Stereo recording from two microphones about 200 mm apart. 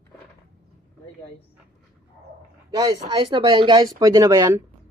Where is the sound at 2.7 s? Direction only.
20° right (ahead or behind).